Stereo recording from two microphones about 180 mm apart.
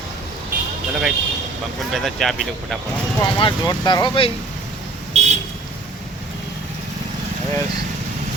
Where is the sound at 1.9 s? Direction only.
Centre (ahead or behind).